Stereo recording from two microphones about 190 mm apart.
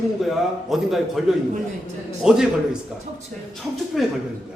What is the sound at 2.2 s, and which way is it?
Speech, 5° right (ahead or behind).